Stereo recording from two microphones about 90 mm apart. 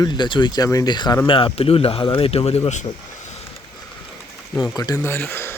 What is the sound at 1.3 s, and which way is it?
A man's voice, 75° left (ahead or behind).